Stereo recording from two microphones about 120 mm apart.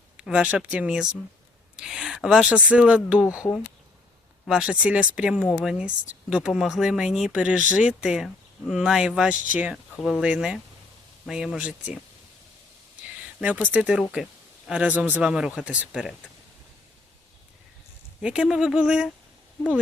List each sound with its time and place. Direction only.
0.2 s a man's voice: 5° right (ahead or behind)
4.4 s a man's voice: 5° right (ahead or behind)
9.3 s speech: 90° left
9.6 s speech: 10° right (ahead or behind)
13.4 s a man's voice: 15° right (ahead or behind)
18.2 s speech: 5° right (ahead or behind)